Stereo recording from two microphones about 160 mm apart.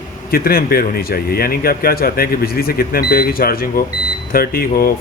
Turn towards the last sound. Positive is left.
turn(degrees=70)  # may be behind; listen again after turning